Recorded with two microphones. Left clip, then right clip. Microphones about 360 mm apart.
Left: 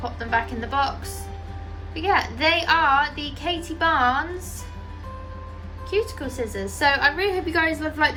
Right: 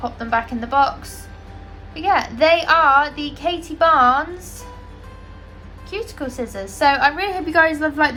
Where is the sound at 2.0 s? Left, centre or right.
Centre.